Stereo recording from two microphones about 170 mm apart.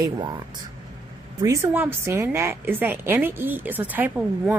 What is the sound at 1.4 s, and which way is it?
A woman's voice, 15° right (ahead or behind).